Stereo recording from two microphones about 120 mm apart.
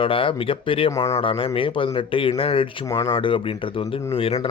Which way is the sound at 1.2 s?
50° left (ahead or behind).